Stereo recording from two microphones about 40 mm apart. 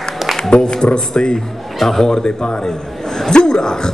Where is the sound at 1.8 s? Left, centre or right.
Centre.